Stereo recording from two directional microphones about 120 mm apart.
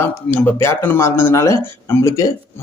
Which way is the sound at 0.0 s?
15° left (ahead or behind).